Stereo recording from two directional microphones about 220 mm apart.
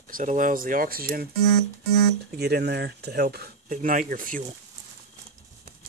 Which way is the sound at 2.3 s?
45° right (ahead or behind).